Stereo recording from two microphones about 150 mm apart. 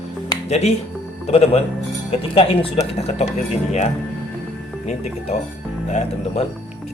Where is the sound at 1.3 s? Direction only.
45° left (ahead or behind).